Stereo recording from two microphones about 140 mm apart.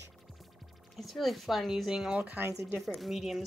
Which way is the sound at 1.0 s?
Centre (ahead or behind).